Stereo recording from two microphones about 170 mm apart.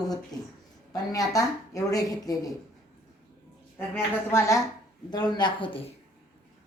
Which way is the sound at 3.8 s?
15° left (ahead or behind).